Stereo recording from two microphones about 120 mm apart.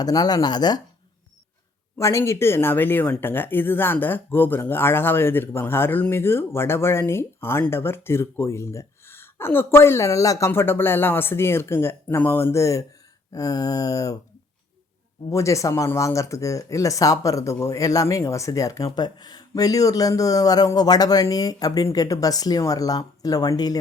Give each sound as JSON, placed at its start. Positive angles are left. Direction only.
{"t": 0.0, "sound": "speech", "side_deg": 35}
{"t": 2.0, "sound": "speech", "side_deg": 25}
{"t": 15.3, "sound": "speech", "side_deg": 25}